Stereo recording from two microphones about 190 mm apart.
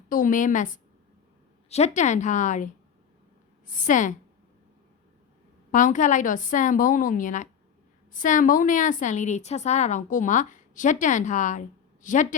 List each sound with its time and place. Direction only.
0.1 s a woman's voice: 45° left (ahead or behind)
3.7 s a woman's voice: 45° left (ahead or behind)
5.7 s a woman's voice: 40° left (ahead or behind)